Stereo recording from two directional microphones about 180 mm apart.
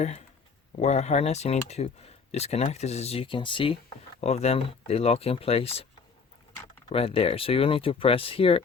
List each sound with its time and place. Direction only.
0.8 s speech: 40° left (ahead or behind)
6.9 s speech: 35° left (ahead or behind)